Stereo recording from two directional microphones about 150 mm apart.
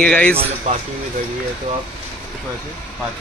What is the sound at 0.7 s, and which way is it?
Speech, 50° right (ahead or behind).